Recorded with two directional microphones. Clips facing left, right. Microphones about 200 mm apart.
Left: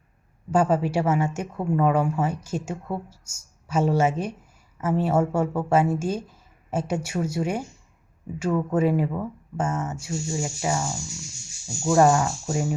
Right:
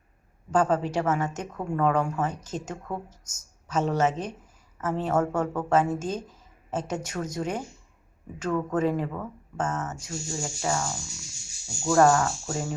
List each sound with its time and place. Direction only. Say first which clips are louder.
0.5 s a woman's voice: left 2 dB; 10° left (ahead or behind)